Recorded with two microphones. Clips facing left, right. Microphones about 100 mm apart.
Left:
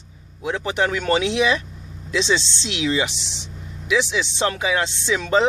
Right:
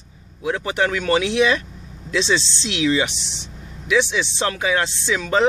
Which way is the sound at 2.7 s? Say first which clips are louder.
Right 3 dB; 25° left (ahead or behind).